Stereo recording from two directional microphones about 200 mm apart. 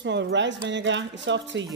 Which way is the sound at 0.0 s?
60° right (ahead or behind).